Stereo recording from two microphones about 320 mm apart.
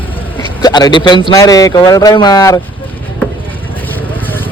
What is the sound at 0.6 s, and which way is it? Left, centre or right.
Speech, centre.